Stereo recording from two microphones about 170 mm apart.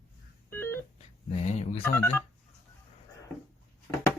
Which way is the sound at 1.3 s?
40° left (ahead or behind).